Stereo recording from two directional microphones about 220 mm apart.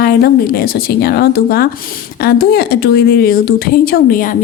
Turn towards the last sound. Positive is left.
turn(degrees=40)  # may be behind; listen again after turning